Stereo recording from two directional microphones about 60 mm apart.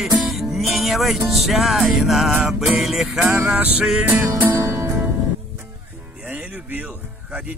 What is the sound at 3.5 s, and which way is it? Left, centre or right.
Music, right.